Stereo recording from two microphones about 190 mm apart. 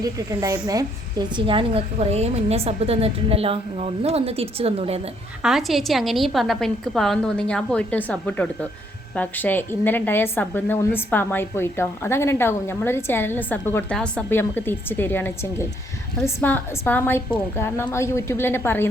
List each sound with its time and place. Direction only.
0.0 s a woman's voice: 20° right (ahead or behind)
5.4 s a woman's voice: centre (ahead or behind)